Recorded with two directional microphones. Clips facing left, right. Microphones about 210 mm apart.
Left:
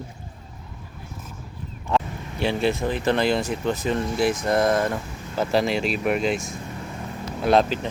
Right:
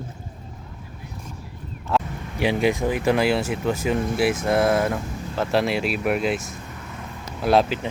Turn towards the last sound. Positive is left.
turn(degrees=-10)  # may be behind; listen again after turning